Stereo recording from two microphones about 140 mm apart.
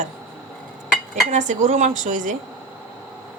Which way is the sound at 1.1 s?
60° right (ahead or behind).